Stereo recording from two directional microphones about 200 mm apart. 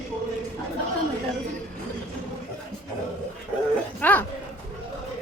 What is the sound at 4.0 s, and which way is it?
Speech, 10° left (ahead or behind).